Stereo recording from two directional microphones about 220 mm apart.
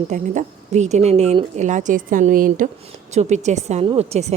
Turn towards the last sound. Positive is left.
turn(degrees=-30)  # may be behind; listen again after turning